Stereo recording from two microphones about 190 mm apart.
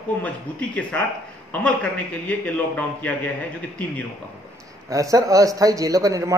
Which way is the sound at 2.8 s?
10° left (ahead or behind).